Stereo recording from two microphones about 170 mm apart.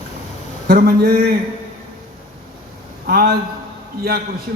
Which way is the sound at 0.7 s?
55° right (ahead or behind).